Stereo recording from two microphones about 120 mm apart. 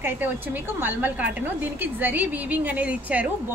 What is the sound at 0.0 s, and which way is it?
A woman's voice, 15° right (ahead or behind).